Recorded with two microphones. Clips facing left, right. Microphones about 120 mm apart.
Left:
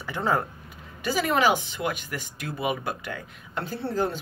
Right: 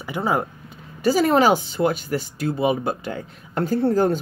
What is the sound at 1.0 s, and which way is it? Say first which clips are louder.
Speech: right 6 dB; 35° right (ahead or behind).